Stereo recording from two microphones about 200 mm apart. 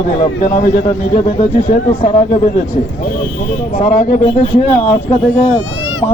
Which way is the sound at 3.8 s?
35° left (ahead or behind).